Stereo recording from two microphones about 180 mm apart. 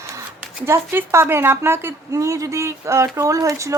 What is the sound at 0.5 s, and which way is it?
A woman's voice, 15° right (ahead or behind).